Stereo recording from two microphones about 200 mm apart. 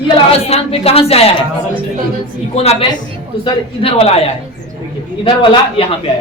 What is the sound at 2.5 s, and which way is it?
A woman's voice, 30° left (ahead or behind).